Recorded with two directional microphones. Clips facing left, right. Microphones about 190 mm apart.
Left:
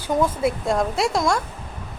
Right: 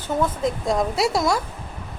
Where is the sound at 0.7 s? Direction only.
Centre (ahead or behind).